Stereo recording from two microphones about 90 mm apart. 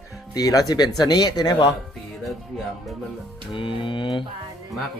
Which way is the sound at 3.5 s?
70° left (ahead or behind).